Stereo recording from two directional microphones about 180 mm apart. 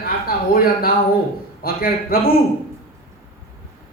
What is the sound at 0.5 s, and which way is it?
A man's voice, 55° left (ahead or behind).